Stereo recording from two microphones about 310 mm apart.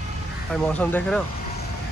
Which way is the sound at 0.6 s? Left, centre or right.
Centre.